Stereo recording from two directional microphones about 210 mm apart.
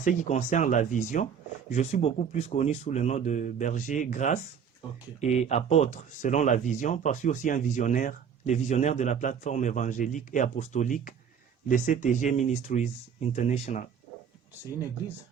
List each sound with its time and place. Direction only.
0.0 s speech: 35° left (ahead or behind)